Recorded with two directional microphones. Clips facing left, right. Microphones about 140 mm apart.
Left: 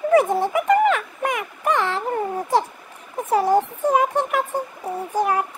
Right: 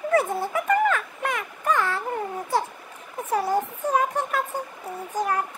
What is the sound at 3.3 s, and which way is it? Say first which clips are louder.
Speech: left 6 dB; 40° left (ahead or behind).